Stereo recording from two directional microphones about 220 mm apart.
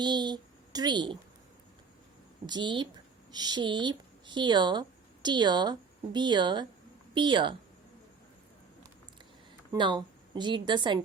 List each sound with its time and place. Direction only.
0.0 s a child's voice: 20° right (ahead or behind)
2.5 s a woman's voice: 20° right (ahead or behind)
9.7 s speech: 20° right (ahead or behind)